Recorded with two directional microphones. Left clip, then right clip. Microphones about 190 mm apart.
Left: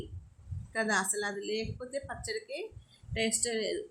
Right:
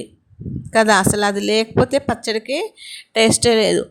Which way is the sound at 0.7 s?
55° right (ahead or behind).